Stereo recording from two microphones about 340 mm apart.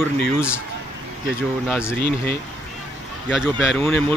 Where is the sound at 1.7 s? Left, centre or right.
Centre.